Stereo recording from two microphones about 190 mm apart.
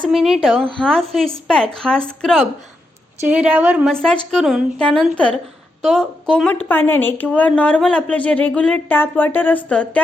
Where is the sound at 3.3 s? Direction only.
10° right (ahead or behind).